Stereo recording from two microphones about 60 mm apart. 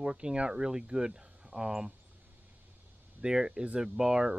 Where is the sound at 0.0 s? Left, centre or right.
Centre.